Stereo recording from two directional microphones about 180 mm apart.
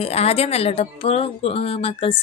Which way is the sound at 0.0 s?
35° left (ahead or behind).